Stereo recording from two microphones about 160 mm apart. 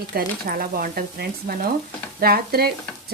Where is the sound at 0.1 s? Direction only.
65° right (ahead or behind).